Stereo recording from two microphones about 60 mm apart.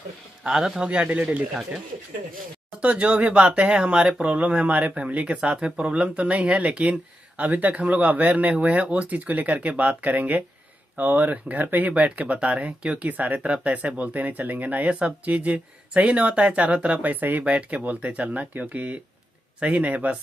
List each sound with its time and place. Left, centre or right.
0.4 s speech: centre
2.8 s speech: right